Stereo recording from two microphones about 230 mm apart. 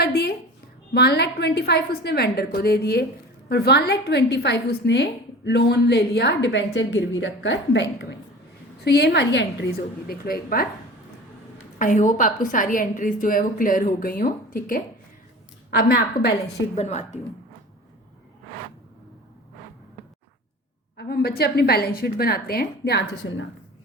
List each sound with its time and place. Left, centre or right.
0.0 s a sound: left
0.9 s a woman's voice: left
11.8 s a woman's voice: left
16.7 s a woman's voice: left
20.9 s a woman's voice: left